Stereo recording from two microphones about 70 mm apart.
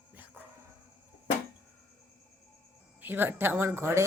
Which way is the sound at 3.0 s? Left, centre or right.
Right.